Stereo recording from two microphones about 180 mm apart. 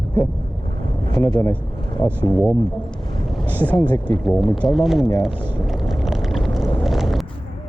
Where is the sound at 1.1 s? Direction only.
20° left (ahead or behind).